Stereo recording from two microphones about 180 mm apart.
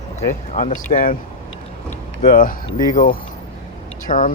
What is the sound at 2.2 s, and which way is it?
Speech, 50° left (ahead or behind).